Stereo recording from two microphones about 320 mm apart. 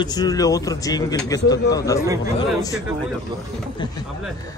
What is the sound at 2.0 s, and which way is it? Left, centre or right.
Speech, centre.